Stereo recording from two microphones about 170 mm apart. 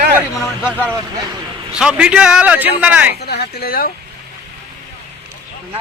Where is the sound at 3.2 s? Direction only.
70° left (ahead or behind).